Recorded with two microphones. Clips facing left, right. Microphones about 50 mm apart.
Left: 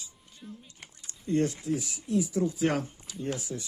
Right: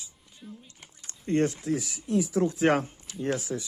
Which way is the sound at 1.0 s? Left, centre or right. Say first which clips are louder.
Right 2 dB; right.